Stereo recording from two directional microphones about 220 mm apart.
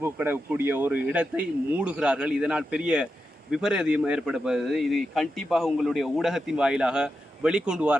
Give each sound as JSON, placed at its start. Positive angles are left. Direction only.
{"t": 0.0, "sound": "a man's voice", "side_deg": -10}